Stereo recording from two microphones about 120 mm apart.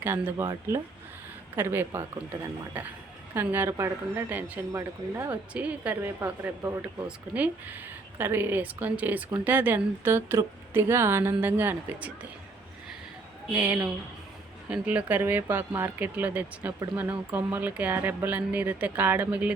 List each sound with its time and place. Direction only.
0.0 s speech: 20° right (ahead or behind)
1.5 s speech: 20° right (ahead or behind)
7.3 s speech: 10° right (ahead or behind)
13.5 s speech: 10° right (ahead or behind)